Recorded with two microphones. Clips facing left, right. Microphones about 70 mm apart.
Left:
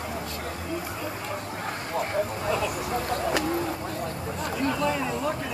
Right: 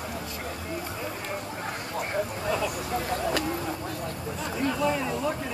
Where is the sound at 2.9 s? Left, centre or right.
Centre.